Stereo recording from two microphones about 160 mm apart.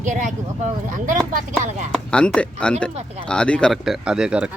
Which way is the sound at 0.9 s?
55° right (ahead or behind).